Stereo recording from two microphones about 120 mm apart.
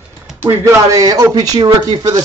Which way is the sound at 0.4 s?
20° right (ahead or behind).